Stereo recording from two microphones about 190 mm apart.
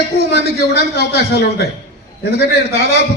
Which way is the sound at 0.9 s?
55° left (ahead or behind).